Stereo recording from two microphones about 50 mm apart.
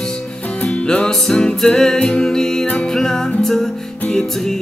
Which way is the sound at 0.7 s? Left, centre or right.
Centre.